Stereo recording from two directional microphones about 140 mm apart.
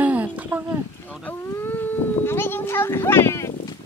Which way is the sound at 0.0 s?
10° right (ahead or behind).